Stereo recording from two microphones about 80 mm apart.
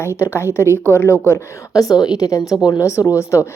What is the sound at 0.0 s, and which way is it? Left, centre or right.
Speech, left.